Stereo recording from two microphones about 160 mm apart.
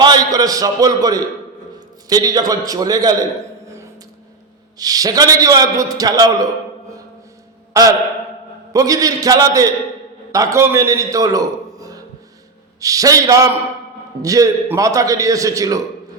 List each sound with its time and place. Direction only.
0.0 s a man's voice: 25° right (ahead or behind)
4.8 s a man's voice: 25° right (ahead or behind)
7.7 s mantra: 20° right (ahead or behind)
8.7 s a man's voice: 20° right (ahead or behind)